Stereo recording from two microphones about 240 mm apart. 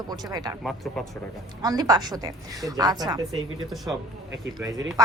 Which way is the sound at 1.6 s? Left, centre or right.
Centre.